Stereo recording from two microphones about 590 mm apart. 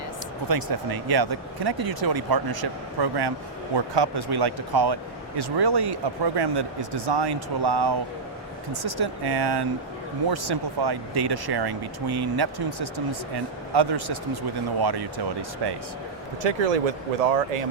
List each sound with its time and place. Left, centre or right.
0.4 s speech: right
16.4 s speech: right